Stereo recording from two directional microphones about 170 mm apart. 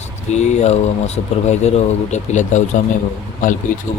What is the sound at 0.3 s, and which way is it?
Speech, 40° left (ahead or behind).